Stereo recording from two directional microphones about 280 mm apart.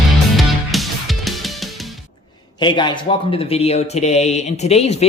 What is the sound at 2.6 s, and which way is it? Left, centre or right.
Speech, centre.